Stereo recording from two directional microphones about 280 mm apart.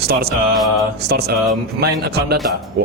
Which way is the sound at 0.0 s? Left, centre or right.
Right.